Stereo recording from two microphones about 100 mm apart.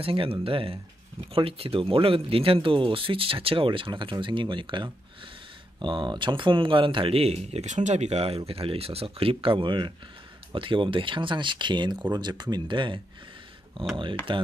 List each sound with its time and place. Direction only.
0.0 s speech: 65° right (ahead or behind); by 8.4 s 90° right
8.5 s speech: 75° right (ahead or behind); by 14.4 s 55° right (ahead or behind)